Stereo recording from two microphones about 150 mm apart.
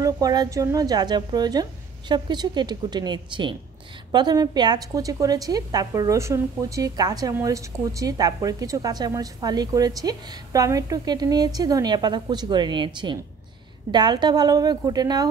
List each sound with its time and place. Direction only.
0.0 s a woman's voice: 25° right (ahead or behind)